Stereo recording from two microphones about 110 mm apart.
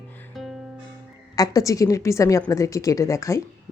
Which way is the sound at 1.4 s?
30° left (ahead or behind).